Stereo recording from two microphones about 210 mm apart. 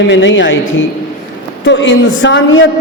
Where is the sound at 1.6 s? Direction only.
60° left (ahead or behind).